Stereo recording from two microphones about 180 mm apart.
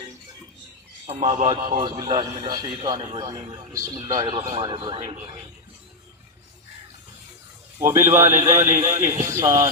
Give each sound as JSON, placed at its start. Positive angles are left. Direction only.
{"t": 1.0, "sound": "a man's voice", "side_deg": -35}
{"t": 7.8, "sound": "a man's voice", "side_deg": -15}